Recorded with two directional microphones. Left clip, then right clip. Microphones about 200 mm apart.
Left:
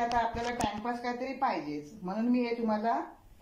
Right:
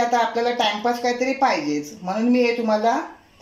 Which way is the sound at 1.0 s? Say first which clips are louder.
Right 12 dB; 50° right (ahead or behind).